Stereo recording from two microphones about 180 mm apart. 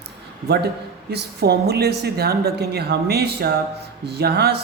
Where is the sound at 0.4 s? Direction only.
65° right (ahead or behind).